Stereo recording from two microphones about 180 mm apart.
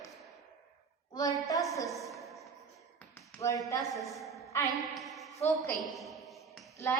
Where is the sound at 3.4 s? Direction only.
15° left (ahead or behind).